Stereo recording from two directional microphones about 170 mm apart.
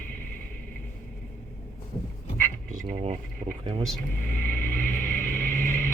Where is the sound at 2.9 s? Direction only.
35° right (ahead or behind).